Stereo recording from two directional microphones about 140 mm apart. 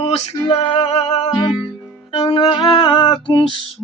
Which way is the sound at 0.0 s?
45° left (ahead or behind).